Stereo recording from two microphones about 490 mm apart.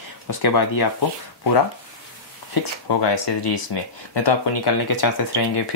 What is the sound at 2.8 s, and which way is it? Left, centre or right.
Speech, left.